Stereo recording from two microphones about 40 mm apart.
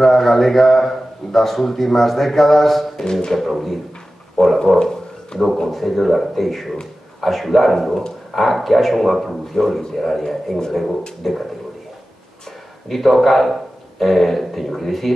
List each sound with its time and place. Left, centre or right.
0.0 s a man's voice: centre
3.1 s speech: centre
3.3 s a man's voice: centre
4.4 s speech: centre
4.7 s a sound: centre
5.7 s a man's voice: centre
12.8 s a man's voice: centre